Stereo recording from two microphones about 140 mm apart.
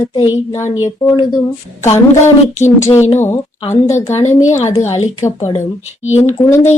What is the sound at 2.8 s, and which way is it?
Speech, 20° left (ahead or behind).